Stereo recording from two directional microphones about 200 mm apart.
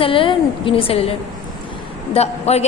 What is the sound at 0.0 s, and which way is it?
A woman's voice, 25° left (ahead or behind).